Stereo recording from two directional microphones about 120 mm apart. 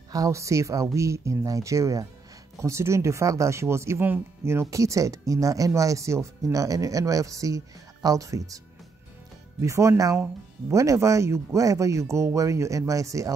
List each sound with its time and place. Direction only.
0.1 s speech: 25° right (ahead or behind)
9.6 s speech: 25° right (ahead or behind)